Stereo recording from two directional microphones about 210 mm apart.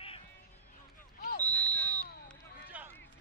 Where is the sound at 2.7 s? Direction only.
5° right (ahead or behind).